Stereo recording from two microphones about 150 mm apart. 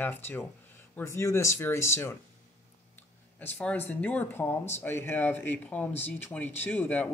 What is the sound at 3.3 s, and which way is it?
Speech, 10° left (ahead or behind).